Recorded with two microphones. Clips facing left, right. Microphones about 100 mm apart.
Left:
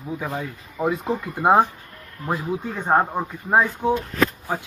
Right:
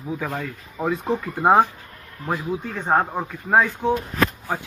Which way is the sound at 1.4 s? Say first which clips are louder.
Even; 5° right (ahead or behind).